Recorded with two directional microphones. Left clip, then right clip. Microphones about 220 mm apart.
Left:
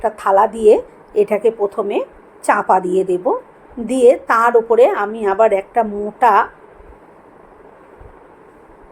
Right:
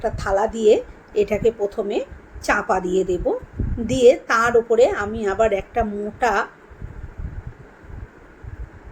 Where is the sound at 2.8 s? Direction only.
35° left (ahead or behind).